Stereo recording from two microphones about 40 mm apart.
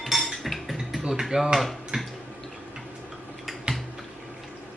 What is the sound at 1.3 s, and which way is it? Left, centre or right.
Speech, right.